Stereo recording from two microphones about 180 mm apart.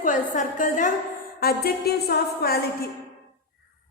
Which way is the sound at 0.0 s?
45° left (ahead or behind).